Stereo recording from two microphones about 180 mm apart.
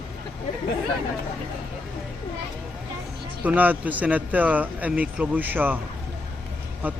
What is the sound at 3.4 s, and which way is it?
Speech, 10° right (ahead or behind).